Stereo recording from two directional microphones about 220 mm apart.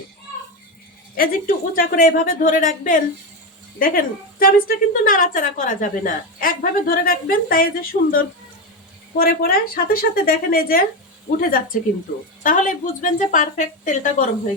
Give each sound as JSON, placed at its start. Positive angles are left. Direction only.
{"t": 1.1, "sound": "a woman's voice", "side_deg": 40}